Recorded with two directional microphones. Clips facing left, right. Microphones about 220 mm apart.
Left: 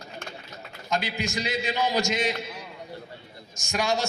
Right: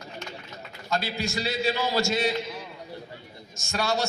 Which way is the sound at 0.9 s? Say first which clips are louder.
Even; 15° left (ahead or behind).